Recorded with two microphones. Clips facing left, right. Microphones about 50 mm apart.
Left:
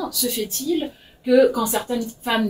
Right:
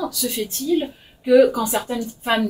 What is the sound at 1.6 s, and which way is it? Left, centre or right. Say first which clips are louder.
Speech: even; right.